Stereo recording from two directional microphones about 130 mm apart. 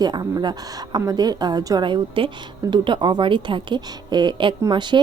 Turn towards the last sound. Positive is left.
turn(degrees=-35)  # may be behind; listen again after turning